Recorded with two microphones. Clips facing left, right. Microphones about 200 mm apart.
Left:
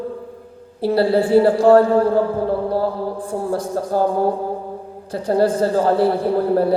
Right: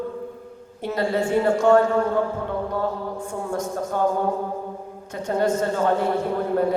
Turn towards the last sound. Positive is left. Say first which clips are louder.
# left 5 dB
turn(degrees=35)  # may be behind; listen again after turning